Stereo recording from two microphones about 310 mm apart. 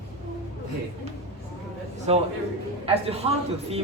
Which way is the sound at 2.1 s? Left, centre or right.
Centre.